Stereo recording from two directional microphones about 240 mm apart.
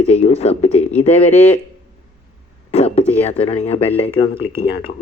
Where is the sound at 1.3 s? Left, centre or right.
Centre.